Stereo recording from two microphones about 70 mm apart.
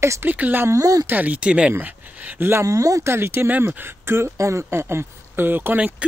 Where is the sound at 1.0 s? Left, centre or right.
Right.